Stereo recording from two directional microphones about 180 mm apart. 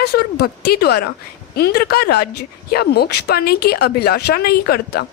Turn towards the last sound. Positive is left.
turn(degrees=60)  # may be behind; listen again after turning